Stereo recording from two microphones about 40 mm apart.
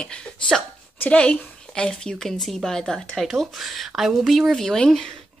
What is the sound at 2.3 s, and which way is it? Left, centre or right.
Speech, centre.